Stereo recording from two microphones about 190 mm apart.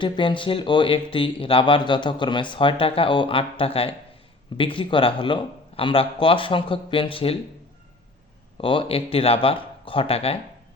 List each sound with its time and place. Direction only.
0.0 s speech: 25° left (ahead or behind)
8.6 s speech: 25° left (ahead or behind)